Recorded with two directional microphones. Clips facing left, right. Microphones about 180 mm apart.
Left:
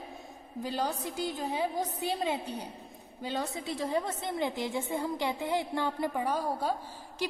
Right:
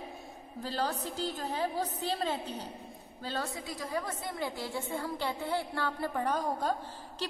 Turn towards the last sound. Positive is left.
turn(degrees=10)  # may be behind; listen again after turning